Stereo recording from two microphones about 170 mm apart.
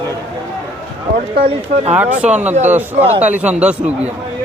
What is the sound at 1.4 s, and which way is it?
Speech, 35° right (ahead or behind).